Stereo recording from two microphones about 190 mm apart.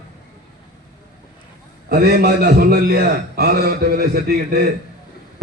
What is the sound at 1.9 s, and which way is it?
A man's voice, 55° right (ahead or behind).